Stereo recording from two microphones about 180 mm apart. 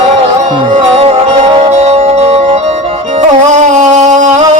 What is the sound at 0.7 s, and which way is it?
Music, 35° right (ahead or behind).